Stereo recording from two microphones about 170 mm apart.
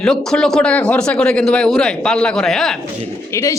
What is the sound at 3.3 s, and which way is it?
Speech, 15° left (ahead or behind).